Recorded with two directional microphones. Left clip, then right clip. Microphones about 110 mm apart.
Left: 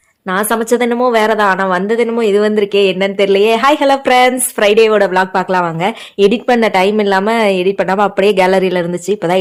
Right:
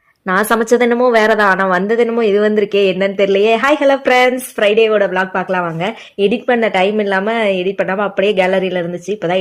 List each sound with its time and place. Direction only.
0.3 s a woman's voice: 5° right (ahead or behind); by 4.4 s 20° left (ahead or behind)
4.6 s a woman's voice: 35° left (ahead or behind)